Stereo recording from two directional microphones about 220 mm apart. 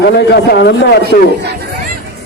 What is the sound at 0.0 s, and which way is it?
Speech, 50° left (ahead or behind).